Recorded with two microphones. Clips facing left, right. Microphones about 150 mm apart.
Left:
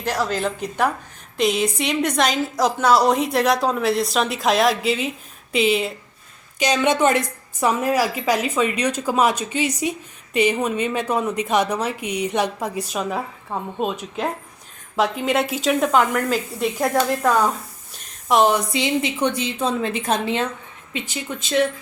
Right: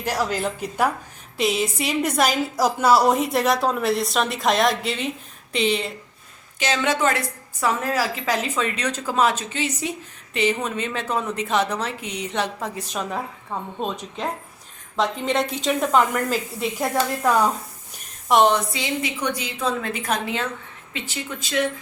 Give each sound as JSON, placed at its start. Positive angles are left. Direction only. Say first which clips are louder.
{"t": 0.0, "sound": "a woman's voice", "louder": "left 1 dB", "side_deg": -10}
{"t": 6.6, "sound": "a woman's voice", "louder": "left 4 dB", "side_deg": 15}
{"t": 18.5, "sound": "a woman's voice", "louder": "left 3 dB", "side_deg": 20}